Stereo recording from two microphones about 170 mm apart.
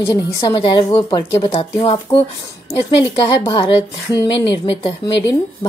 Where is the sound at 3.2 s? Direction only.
25° left (ahead or behind).